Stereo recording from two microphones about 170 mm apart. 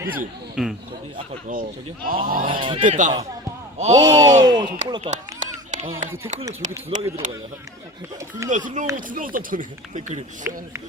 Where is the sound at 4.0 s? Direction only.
25° right (ahead or behind).